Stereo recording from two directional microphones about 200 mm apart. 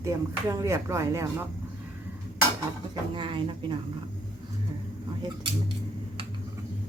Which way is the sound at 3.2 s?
25° right (ahead or behind).